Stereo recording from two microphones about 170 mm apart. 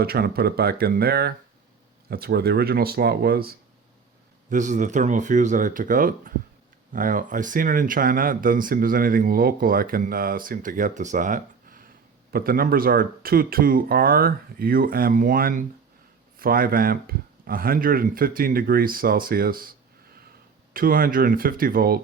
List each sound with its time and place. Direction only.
0.0 s speech: 65° right (ahead or behind)
4.4 s speech: 45° right (ahead or behind)
20.7 s speech: 60° right (ahead or behind)